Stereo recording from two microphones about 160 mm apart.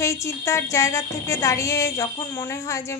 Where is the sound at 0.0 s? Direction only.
20° left (ahead or behind).